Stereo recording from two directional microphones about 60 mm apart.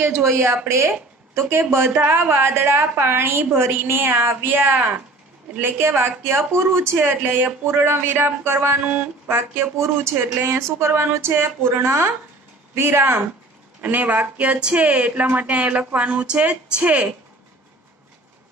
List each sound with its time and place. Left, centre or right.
0.0 s speech: right
1.9 s a woman's voice: right
10.4 s a woman's voice: right
13.7 s speech: right